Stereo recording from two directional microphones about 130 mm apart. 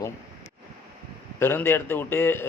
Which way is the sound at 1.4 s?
15° left (ahead or behind).